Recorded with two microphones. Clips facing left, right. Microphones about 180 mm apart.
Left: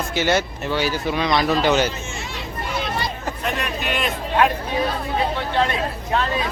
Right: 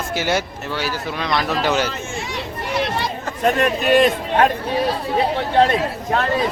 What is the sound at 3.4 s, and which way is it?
Speech, 45° right (ahead or behind).